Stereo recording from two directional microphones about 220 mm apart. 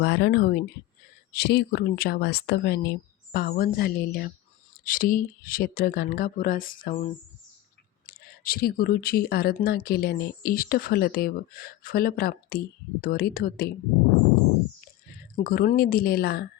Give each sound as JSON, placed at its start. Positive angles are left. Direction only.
{"t": 0.0, "sound": "speech", "side_deg": 50}
{"t": 15.4, "sound": "speech", "side_deg": 40}